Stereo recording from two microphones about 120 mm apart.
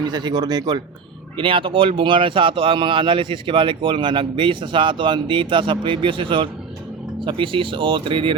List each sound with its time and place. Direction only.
0.0 s speech: 35° right (ahead or behind)
1.4 s speech: 45° right (ahead or behind)